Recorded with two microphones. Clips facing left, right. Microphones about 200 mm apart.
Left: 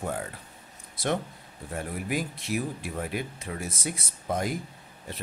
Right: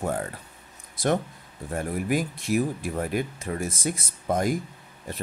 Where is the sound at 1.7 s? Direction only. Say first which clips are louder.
Right 5 dB; 50° right (ahead or behind).